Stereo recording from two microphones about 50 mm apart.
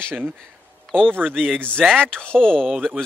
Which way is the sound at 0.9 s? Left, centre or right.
Centre.